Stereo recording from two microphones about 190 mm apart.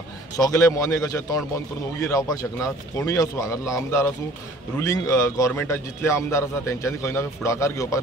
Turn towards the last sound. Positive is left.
turn(degrees=15)  # may be behind; listen again after turning